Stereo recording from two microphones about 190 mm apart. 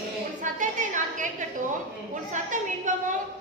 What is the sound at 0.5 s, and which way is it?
Speech, 40° right (ahead or behind).